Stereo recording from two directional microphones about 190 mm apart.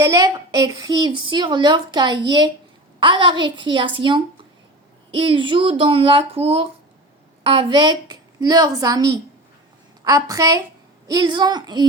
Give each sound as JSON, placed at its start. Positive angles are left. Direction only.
{"t": 0.0, "sound": "a woman's voice", "side_deg": -15}